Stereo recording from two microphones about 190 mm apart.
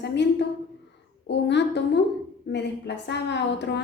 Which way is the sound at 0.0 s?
65° left (ahead or behind).